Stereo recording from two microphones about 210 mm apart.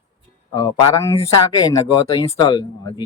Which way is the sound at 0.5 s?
15° left (ahead or behind).